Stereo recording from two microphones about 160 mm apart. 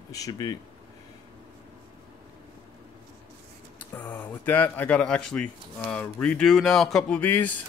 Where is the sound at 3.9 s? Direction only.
10° left (ahead or behind).